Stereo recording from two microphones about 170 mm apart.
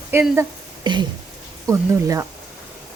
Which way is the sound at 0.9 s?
25° right (ahead or behind).